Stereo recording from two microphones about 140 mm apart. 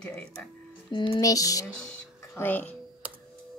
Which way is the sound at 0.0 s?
5° left (ahead or behind).